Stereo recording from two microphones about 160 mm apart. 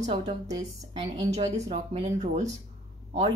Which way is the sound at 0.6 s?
25° right (ahead or behind).